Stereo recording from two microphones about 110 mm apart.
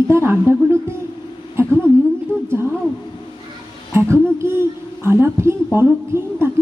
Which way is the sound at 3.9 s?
25° right (ahead or behind).